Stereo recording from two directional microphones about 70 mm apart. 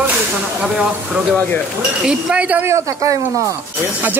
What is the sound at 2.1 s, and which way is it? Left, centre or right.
Speech, centre.